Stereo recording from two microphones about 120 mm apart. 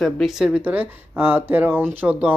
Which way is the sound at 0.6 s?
15° right (ahead or behind).